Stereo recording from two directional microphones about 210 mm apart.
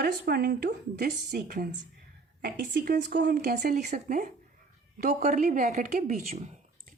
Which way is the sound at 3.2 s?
40° right (ahead or behind).